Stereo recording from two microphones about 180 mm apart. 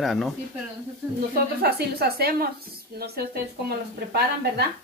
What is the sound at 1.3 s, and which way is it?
Speech, 60° right (ahead or behind).